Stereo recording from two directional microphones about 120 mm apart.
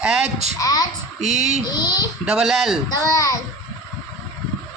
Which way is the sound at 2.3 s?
Centre (ahead or behind).